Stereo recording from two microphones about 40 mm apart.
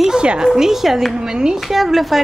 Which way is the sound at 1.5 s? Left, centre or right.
Centre.